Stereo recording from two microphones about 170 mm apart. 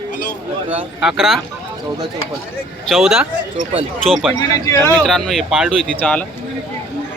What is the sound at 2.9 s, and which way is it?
Speech, centre (ahead or behind).